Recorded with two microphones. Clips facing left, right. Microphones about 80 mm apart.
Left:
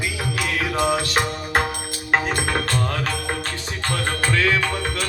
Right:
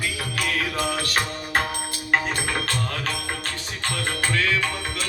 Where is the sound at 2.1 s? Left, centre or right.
Left.